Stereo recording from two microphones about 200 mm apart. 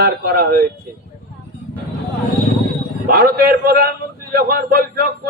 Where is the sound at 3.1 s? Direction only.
50° right (ahead or behind).